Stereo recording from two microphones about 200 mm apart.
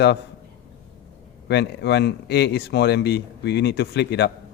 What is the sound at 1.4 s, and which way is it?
A man's voice, 55° left (ahead or behind).